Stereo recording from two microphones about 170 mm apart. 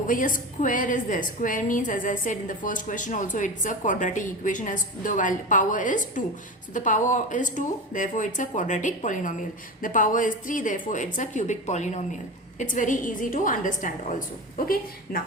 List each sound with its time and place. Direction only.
0.1 s a woman's voice: 50° left (ahead or behind)